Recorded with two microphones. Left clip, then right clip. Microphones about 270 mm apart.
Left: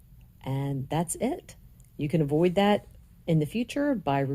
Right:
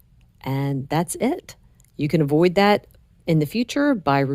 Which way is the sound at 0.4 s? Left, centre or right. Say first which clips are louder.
Right 7 dB; right.